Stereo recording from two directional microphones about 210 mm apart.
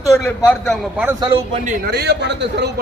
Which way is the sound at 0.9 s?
5° right (ahead or behind).